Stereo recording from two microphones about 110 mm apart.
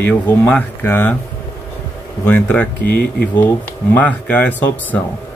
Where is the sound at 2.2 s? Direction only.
20° left (ahead or behind).